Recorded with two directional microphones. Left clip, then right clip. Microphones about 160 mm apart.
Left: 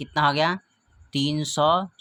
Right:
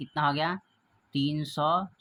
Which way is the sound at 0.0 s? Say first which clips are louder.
Left 6 dB; 45° left (ahead or behind).